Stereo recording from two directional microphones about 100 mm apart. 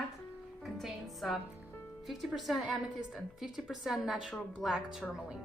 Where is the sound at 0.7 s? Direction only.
Centre (ahead or behind).